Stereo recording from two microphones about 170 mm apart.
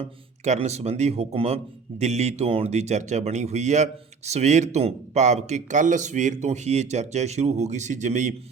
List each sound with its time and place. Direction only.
0.0 s speech: 40° right (ahead or behind)